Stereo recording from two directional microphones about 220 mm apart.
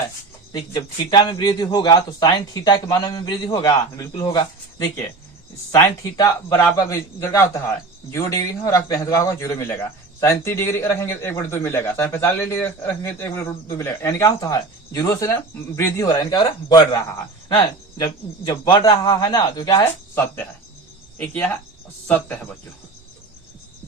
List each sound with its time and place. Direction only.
0.5 s a man's voice: 20° left (ahead or behind)